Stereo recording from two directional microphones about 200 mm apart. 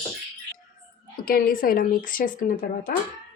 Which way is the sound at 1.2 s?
45° left (ahead or behind).